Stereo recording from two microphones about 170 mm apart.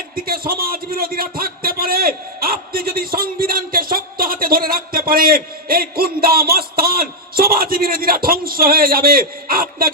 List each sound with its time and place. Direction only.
0.3 s a man's voice: 60° right (ahead or behind)